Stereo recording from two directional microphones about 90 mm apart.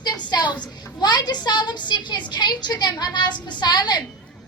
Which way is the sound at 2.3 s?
55° left (ahead or behind).